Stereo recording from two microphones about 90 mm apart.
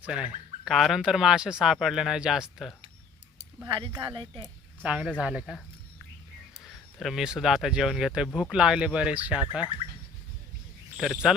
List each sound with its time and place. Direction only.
0.0 s speech: 15° right (ahead or behind)
3.7 s speech: 65° right (ahead or behind)
4.8 s speech: 10° right (ahead or behind)
6.7 s speech: 5° right (ahead or behind)
10.9 s speech: centre (ahead or behind)